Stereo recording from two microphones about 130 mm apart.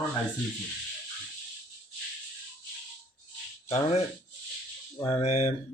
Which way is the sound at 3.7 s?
50° left (ahead or behind).